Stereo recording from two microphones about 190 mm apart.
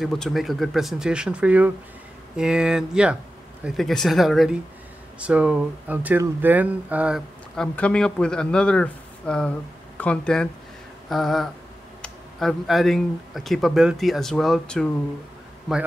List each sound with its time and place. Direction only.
0.0 s speech: centre (ahead or behind)